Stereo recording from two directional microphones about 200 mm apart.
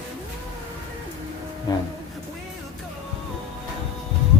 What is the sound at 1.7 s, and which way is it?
Speech, 20° left (ahead or behind).